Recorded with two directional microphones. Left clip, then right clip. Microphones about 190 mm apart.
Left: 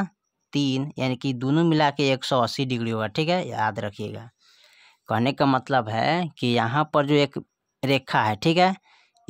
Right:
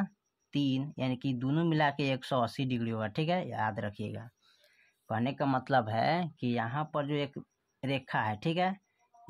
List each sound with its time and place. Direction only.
0.0 s speech: 45° left (ahead or behind)
5.0 s speech: 50° left (ahead or behind)
5.6 s speech: 35° left (ahead or behind); by 8.8 s 55° left (ahead or behind)